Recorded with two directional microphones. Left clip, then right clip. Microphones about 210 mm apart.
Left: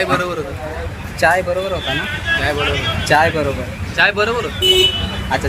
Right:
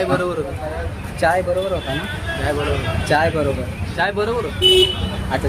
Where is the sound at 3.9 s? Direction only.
25° right (ahead or behind).